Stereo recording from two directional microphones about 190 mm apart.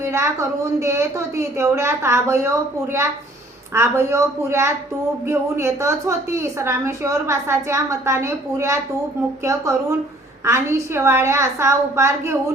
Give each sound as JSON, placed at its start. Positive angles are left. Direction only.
{"t": 0.0, "sound": "a woman's voice", "side_deg": -15}
{"t": 3.8, "sound": "a woman's voice", "side_deg": -15}